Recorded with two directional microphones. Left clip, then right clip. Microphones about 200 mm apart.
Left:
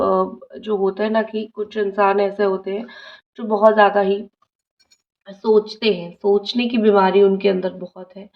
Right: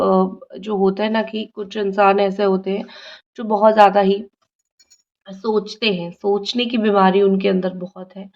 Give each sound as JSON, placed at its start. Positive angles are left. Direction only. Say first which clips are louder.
{"t": 0.0, "sound": "speech", "louder": "right 1 dB", "side_deg": -45}
{"t": 5.2, "sound": "speech", "louder": "left 4 dB", "side_deg": -30}